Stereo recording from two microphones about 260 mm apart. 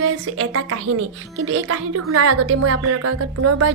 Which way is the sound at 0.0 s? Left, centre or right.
Right.